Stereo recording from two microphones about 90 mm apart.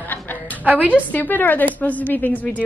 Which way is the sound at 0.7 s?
20° right (ahead or behind).